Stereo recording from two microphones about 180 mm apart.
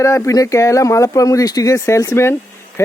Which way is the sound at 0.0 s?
15° left (ahead or behind).